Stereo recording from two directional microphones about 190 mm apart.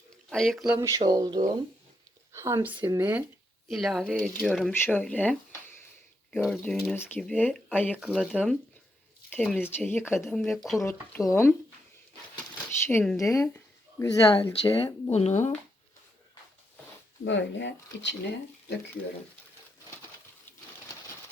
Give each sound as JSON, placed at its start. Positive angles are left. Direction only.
{"t": 0.1, "sound": "speech", "side_deg": 5}
{"t": 0.8, "sound": "speech", "side_deg": -15}
{"t": 7.9, "sound": "speech", "side_deg": -5}
{"t": 11.3, "sound": "speech", "side_deg": 15}
{"t": 12.8, "sound": "speech", "side_deg": 10}
{"t": 15.1, "sound": "speech", "side_deg": 35}
{"t": 17.2, "sound": "speech", "side_deg": 70}